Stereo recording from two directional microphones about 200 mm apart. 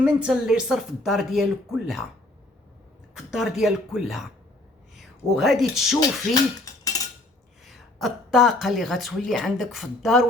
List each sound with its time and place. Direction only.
0.0 s speech: 5° right (ahead or behind)
3.2 s speech: centre (ahead or behind)
6.8 s cutlery: 20° left (ahead or behind)
7.6 s speech: centre (ahead or behind)